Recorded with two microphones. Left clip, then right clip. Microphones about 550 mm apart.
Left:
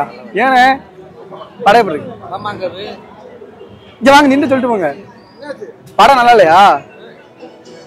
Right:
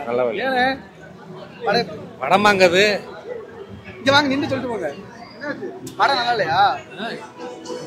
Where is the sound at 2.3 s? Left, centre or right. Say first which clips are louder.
Right 8 dB; right.